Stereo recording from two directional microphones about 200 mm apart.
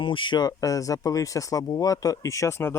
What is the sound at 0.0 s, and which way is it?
Speech, 25° left (ahead or behind).